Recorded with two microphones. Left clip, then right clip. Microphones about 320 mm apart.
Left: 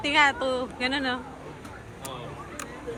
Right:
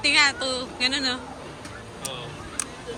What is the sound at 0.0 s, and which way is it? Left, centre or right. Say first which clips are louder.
A man's voice: right 2 dB; centre.